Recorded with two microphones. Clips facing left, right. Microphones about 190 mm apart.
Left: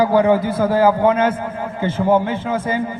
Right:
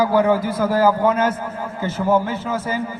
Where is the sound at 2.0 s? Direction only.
20° left (ahead or behind).